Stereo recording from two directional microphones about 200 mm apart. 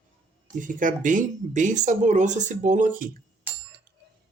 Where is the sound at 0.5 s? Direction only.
40° right (ahead or behind).